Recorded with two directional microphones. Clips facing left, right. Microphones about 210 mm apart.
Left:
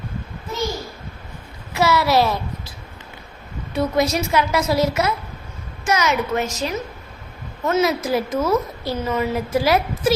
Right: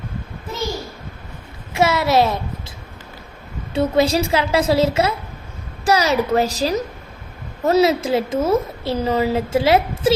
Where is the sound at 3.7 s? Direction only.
30° right (ahead or behind).